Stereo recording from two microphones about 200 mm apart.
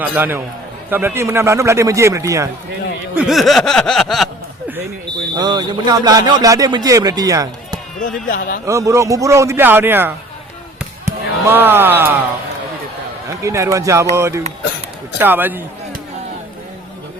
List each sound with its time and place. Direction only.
0.0 s a man's voice: 10° right (ahead or behind)
3.2 s snicker: centre (ahead or behind)
5.3 s speech: 20° right (ahead or behind)
8.0 s speech: 45° left (ahead or behind)
8.6 s a man's voice: 15° right (ahead or behind)
11.0 s a sound: 10° right (ahead or behind)
13.4 s a man's voice: 15° right (ahead or behind)